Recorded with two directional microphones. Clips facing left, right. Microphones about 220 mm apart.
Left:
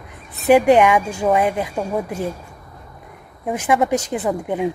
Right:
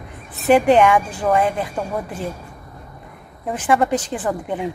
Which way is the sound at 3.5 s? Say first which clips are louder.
Even; 15° left (ahead or behind).